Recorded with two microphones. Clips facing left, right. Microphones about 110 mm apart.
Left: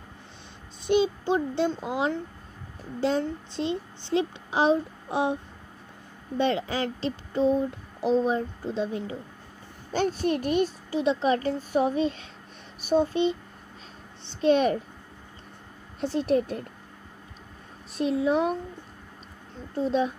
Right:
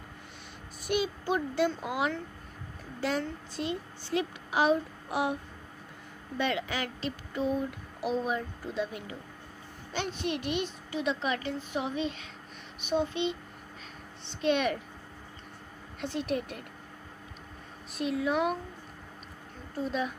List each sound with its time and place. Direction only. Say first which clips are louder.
0.8 s a child's voice: left 7 dB; 25° left (ahead or behind)
14.4 s speech: left 6 dB; 35° left (ahead or behind)
16.0 s speech: left 8 dB; 35° left (ahead or behind)
17.9 s speech: left 5 dB; 30° left (ahead or behind)
19.8 s speech: left 7 dB; 30° left (ahead or behind)